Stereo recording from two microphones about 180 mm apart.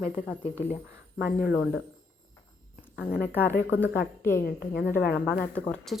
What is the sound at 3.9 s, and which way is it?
Speech, 15° left (ahead or behind).